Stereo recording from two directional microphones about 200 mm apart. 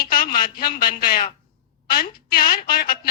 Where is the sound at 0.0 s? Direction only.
45° left (ahead or behind).